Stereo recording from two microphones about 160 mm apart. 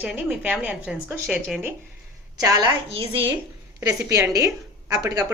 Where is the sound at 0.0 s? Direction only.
10° right (ahead or behind).